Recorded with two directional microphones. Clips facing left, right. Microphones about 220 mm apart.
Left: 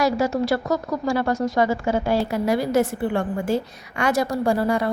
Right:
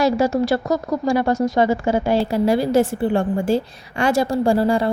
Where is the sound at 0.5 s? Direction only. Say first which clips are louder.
Right 3 dB; 25° right (ahead or behind).